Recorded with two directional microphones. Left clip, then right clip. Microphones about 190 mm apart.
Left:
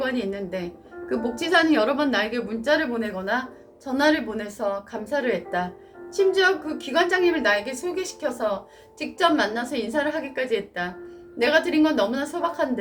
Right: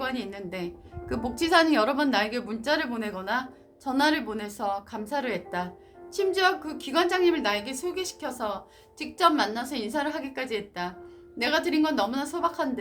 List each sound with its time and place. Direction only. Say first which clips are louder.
0.0 s speech: left 6 dB; 50° right (ahead or behind)